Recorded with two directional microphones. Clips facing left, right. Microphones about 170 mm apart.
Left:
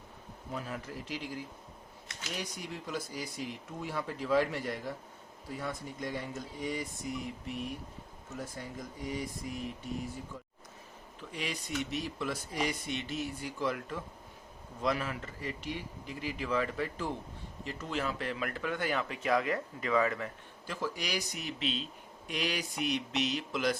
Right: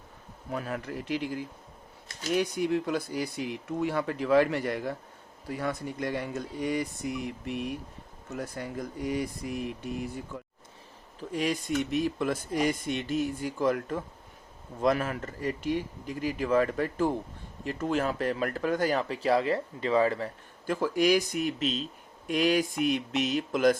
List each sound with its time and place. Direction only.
0.5 s speech: 65° right (ahead or behind)
2.3 s speech: 60° right (ahead or behind)
11.2 s speech: 45° right (ahead or behind)
20.7 s speech: 50° right (ahead or behind)